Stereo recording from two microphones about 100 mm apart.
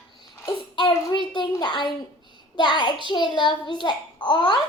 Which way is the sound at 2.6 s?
50° left (ahead or behind).